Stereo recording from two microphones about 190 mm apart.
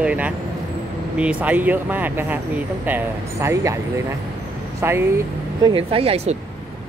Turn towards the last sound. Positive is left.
turn(degrees=-35)  # may be behind; listen again after turning